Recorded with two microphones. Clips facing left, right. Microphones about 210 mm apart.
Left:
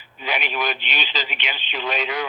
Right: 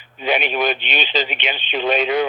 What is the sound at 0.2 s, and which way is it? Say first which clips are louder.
Speech: right 7 dB; 25° right (ahead or behind).